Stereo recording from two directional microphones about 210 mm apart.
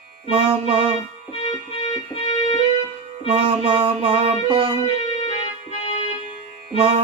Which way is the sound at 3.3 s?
25° right (ahead or behind).